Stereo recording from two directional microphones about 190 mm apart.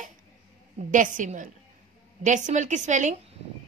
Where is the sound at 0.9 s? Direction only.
40° right (ahead or behind).